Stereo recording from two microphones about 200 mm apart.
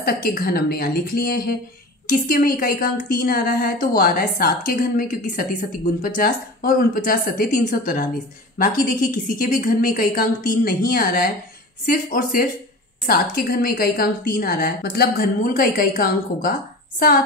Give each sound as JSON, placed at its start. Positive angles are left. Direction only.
{"t": 0.0, "sound": "a woman's voice", "side_deg": 50}